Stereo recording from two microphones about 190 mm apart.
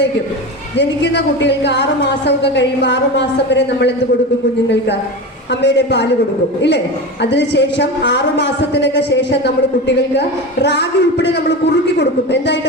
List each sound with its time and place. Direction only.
0.8 s a woman's voice: 65° left (ahead or behind)
5.6 s a woman's voice: 65° left (ahead or behind)